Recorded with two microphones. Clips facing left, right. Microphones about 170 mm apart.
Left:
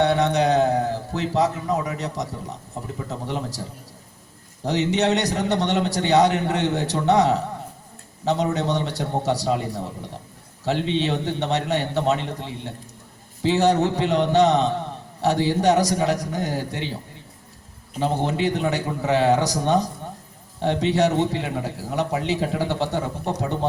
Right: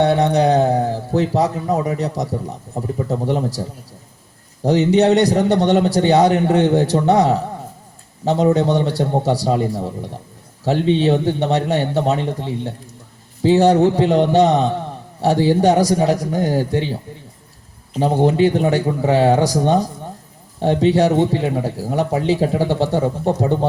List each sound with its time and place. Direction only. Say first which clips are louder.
0.0 s speech: right 4 dB; 35° right (ahead or behind)
4.6 s speech: right 7 dB; 40° right (ahead or behind)
13.4 s speech: right 6 dB; 35° right (ahead or behind)
18.0 s speech: right 8 dB; 35° right (ahead or behind)